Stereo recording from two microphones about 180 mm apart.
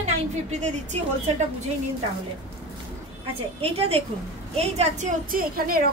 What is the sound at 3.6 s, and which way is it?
A woman's voice, 35° right (ahead or behind).